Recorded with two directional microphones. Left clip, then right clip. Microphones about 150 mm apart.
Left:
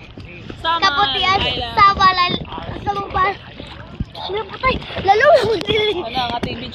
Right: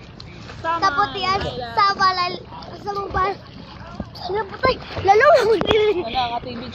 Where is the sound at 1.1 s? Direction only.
15° left (ahead or behind).